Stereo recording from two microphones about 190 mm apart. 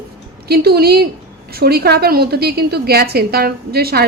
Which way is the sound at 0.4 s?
55° right (ahead or behind).